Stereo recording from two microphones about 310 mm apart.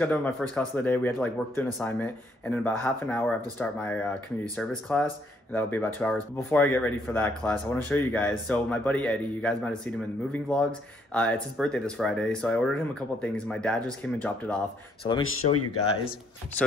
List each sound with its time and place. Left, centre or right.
0.0 s speech: centre
15.2 s speech: left